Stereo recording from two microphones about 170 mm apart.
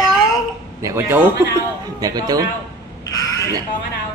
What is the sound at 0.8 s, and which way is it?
Speech, 15° right (ahead or behind).